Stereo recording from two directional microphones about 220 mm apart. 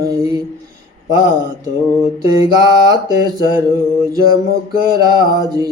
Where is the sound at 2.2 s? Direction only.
15° right (ahead or behind).